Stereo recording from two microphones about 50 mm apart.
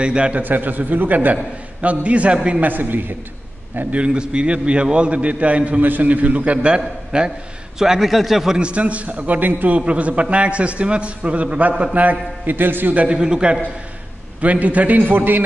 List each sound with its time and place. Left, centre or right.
0.0 s a man's voice: right
0.4 s a man's voice: right
2.6 s a man's voice: right
3.9 s a man's voice: right; by 8.5 s centre
8.5 s a man's voice: right
9.8 s a man's voice: right
12.9 s a man's voice: right
14.4 s a man's voice: right